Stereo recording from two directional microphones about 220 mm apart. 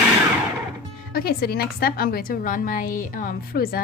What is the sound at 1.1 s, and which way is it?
A woman's voice, 45° left (ahead or behind).